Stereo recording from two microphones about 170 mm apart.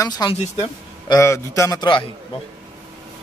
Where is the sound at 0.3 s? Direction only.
25° left (ahead or behind).